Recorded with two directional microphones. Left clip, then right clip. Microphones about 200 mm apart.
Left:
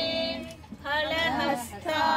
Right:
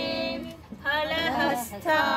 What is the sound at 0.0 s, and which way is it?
Music, 25° right (ahead or behind).